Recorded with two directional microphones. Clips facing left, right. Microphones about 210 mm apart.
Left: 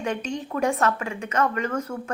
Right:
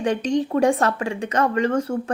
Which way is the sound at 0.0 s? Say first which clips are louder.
Right 7 dB; 35° right (ahead or behind).